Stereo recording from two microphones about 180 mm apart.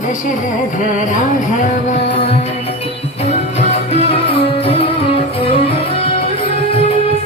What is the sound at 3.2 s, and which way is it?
Music, 35° left (ahead or behind).